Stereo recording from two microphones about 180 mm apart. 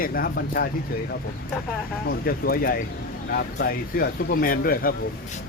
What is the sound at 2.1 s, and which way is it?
Speech, 55° left (ahead or behind).